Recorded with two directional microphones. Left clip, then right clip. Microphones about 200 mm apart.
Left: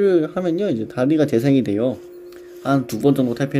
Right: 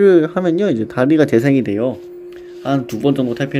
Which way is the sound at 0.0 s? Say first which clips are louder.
Right 6 dB; 15° right (ahead or behind).